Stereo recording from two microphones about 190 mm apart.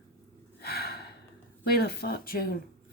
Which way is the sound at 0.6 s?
55° left (ahead or behind).